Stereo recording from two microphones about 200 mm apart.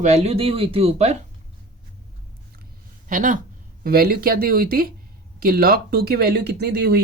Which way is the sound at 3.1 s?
40° right (ahead or behind).